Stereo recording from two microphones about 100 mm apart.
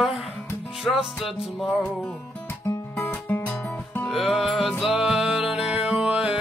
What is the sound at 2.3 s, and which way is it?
Music, 25° left (ahead or behind).